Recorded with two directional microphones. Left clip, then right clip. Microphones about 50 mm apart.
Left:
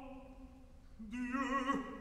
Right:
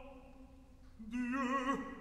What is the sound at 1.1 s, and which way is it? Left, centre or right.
Music, right.